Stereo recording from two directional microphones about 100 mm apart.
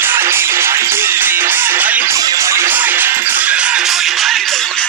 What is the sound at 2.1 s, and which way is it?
Music, 35° right (ahead or behind).